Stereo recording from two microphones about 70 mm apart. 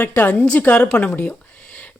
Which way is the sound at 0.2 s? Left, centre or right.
Left.